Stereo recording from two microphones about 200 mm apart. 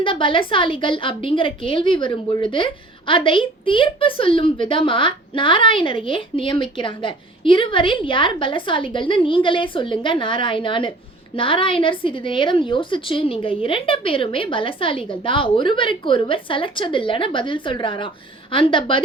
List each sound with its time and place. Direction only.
0.0 s a woman's voice: 25° left (ahead or behind)